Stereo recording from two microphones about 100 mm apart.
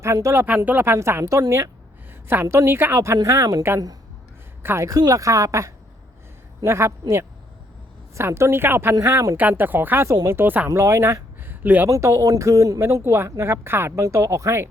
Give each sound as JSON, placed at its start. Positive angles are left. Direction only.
{"t": 0.0, "sound": "speech", "side_deg": -30}
{"t": 0.4, "sound": "speech", "side_deg": -15}
{"t": 4.6, "sound": "speech", "side_deg": -25}
{"t": 4.9, "sound": "speech", "side_deg": -35}
{"t": 8.1, "sound": "speech", "side_deg": -30}
{"t": 9.4, "sound": "speech", "side_deg": -20}
{"t": 10.1, "sound": "speech", "side_deg": -30}
{"t": 10.4, "sound": "speech", "side_deg": -20}
{"t": 10.7, "sound": "speech", "side_deg": -30}
{"t": 11.9, "sound": "speech", "side_deg": -30}